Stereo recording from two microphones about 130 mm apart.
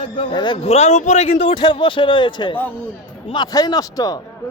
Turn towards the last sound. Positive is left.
turn(degrees=30)  # may be behind; listen again after turning